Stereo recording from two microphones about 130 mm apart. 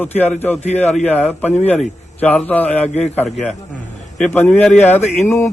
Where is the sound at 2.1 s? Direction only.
10° left (ahead or behind).